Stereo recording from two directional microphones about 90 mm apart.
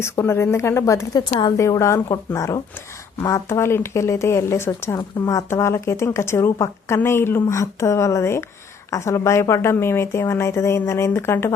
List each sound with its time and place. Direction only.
0.0 s a woman's voice: 30° left (ahead or behind)
1.1 s speech: 45° left (ahead or behind)
4.9 s speech: 45° left (ahead or behind)
5.5 s speech: 30° left (ahead or behind)